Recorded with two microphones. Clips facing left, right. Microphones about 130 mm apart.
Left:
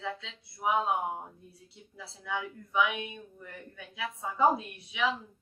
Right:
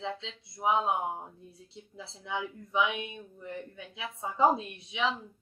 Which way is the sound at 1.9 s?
25° right (ahead or behind).